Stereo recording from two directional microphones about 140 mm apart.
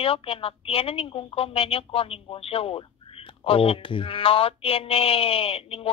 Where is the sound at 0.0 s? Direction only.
45° left (ahead or behind).